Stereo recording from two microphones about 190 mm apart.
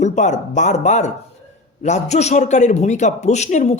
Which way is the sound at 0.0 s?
40° left (ahead or behind).